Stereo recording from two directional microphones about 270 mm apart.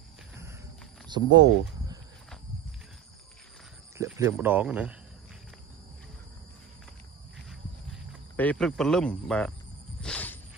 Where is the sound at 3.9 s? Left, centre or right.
Centre.